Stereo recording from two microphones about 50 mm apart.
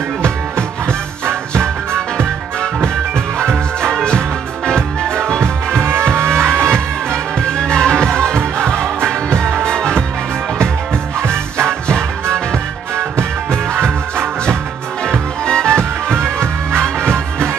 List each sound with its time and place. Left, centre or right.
0.2 s music: centre
5.8 s music: right
6.7 s music: centre
11.2 s music: centre
14.2 s music: centre